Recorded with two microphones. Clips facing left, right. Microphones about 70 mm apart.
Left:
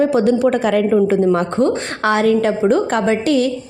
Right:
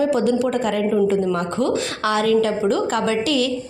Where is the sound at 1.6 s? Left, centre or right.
Left.